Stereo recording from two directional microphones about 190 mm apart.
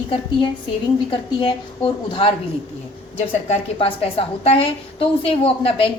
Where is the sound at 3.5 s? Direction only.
30° left (ahead or behind).